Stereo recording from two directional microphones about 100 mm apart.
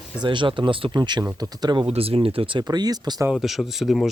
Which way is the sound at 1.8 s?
75° right (ahead or behind).